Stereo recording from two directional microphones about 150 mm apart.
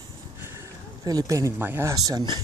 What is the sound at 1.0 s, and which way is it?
Speech, 25° right (ahead or behind).